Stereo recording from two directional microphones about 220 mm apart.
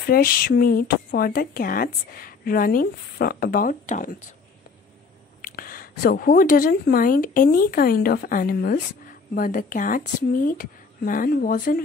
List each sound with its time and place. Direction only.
0.0 s speech: 40° left (ahead or behind)
5.4 s speech: 40° left (ahead or behind)